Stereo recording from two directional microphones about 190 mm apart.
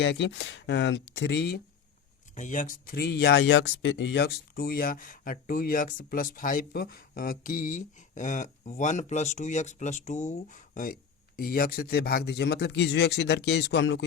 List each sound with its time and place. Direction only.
0.0 s speech: 65° left (ahead or behind)
2.3 s speech: 40° left (ahead or behind); by 14.0 s 65° left (ahead or behind)